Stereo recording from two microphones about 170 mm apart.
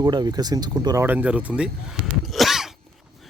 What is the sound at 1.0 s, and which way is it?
Speech, 10° right (ahead or behind).